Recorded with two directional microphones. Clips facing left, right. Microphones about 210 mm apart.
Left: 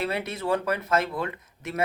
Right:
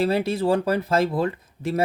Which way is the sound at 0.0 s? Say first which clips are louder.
Right 8 dB; 30° right (ahead or behind).